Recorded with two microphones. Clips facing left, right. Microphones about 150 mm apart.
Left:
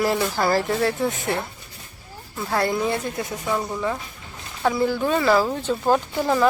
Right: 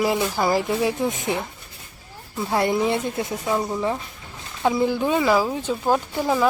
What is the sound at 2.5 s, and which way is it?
Speech, 20° right (ahead or behind).